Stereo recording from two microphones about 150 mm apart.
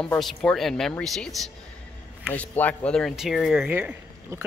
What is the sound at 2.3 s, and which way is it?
Speech, 10° left (ahead or behind).